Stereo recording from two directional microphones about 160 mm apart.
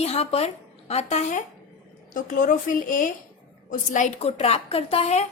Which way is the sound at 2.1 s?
55° left (ahead or behind).